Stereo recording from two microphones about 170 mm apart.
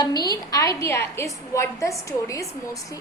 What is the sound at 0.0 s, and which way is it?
A woman's voice, 25° left (ahead or behind).